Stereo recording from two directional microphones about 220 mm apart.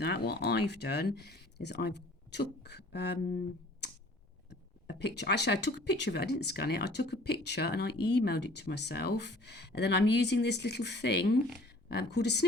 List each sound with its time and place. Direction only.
0.0 s speech: 50° left (ahead or behind)
4.4 s a woman's voice: 50° left (ahead or behind)